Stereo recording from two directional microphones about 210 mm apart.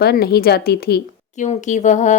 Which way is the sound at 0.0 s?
50° left (ahead or behind).